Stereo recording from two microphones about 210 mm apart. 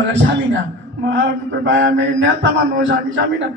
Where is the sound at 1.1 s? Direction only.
60° right (ahead or behind).